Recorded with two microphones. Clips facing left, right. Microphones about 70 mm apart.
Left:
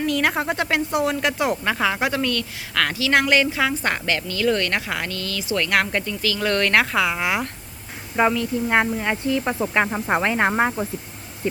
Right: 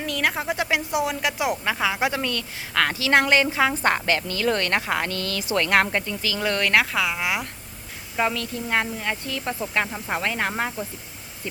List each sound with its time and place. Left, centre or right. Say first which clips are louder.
0.0 s speech: left 4 dB; centre
2.0 s a woman's voice: left 2 dB; centre
5.9 s speech: left 2 dB; centre
8.2 s speech: left 5 dB; centre